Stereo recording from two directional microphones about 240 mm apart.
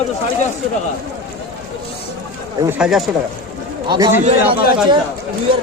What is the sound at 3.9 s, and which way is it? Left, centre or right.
Speech, centre.